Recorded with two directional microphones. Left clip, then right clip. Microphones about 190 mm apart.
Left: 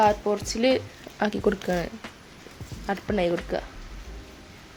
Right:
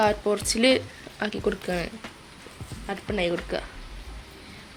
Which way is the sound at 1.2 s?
20° left (ahead or behind).